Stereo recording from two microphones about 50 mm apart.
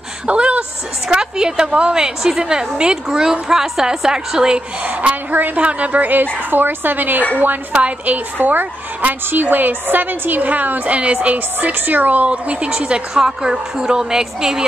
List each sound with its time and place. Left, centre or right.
0.3 s a sound: right
1.0 s a woman's voice: centre
4.8 s a woman's voice: right
7.7 s a woman's voice: right
11.3 s a woman's voice: right; by 14.6 s centre